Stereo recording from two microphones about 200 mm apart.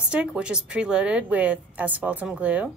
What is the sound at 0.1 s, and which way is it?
A woman's voice, 5° right (ahead or behind).